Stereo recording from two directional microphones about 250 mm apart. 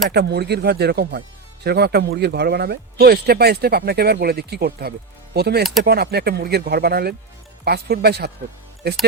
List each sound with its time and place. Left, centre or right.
0.1 s speech: right